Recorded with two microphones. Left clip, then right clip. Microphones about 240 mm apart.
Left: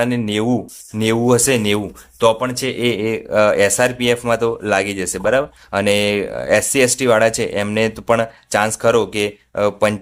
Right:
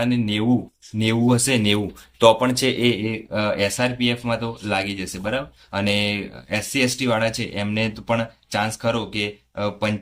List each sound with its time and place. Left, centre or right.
0.0 s speech: left